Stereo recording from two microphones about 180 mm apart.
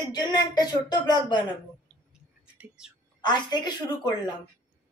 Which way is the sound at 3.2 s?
25° left (ahead or behind).